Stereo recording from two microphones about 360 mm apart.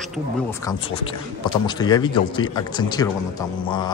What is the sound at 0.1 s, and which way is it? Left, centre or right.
Speech, centre.